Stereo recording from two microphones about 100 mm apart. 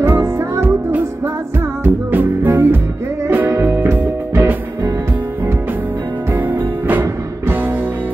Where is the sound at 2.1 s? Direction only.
20° right (ahead or behind).